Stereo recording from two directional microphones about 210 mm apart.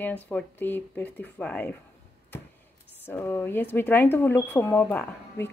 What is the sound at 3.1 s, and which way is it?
Speech, 10° left (ahead or behind).